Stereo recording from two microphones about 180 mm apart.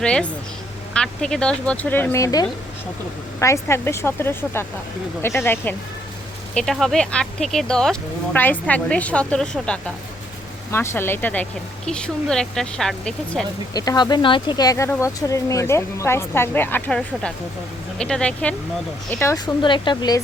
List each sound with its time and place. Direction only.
0.0 s speech: 5° left (ahead or behind)
13.7 s speech: 20° left (ahead or behind); by 18.5 s 5° left (ahead or behind)
19.6 s speech: 25° left (ahead or behind)